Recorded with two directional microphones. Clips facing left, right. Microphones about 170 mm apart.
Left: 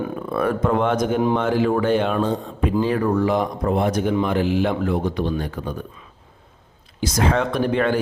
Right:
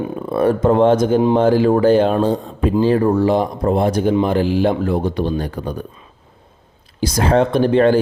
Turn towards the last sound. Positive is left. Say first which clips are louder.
# right 7 dB
turn(degrees=-30)  # may be behind; listen again after turning